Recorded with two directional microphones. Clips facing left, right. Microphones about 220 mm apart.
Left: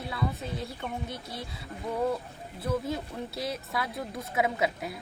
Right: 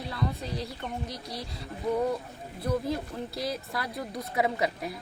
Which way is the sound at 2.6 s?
5° left (ahead or behind).